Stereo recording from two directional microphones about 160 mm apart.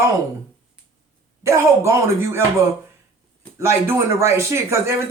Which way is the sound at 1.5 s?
20° right (ahead or behind).